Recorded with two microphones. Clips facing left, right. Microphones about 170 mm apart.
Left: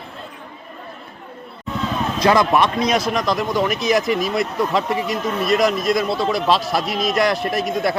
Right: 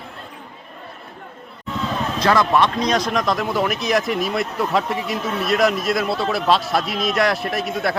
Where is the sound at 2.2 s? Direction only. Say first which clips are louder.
Left 1 dB; 10° left (ahead or behind).